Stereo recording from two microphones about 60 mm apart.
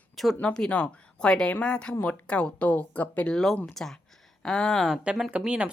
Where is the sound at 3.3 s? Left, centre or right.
Centre.